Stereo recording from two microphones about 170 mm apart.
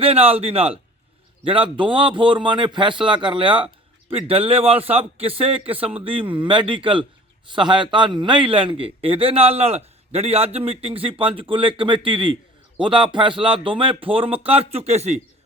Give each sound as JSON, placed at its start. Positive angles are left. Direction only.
{"t": 0.0, "sound": "a man's voice", "side_deg": -35}